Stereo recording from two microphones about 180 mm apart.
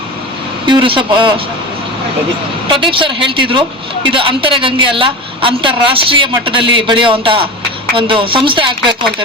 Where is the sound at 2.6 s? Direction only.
30° right (ahead or behind).